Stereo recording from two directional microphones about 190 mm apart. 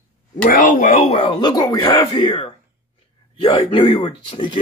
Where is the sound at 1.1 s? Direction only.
25° left (ahead or behind).